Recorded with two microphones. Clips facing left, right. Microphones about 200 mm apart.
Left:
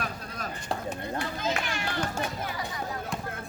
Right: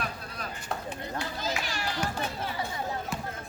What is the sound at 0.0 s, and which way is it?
Chopping, 40° left (ahead or behind).